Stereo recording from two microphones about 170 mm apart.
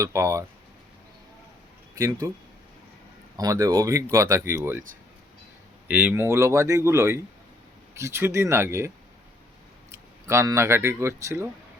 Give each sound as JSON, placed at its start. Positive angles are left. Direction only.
{"t": 0.0, "sound": "speech", "side_deg": -20}
{"t": 2.0, "sound": "speech", "side_deg": -15}
{"t": 3.3, "sound": "speech", "side_deg": -20}
{"t": 5.9, "sound": "speech", "side_deg": -10}
{"t": 9.9, "sound": "speech", "side_deg": -15}